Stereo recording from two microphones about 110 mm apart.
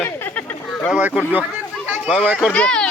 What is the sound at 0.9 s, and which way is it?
Speech, 10° right (ahead or behind).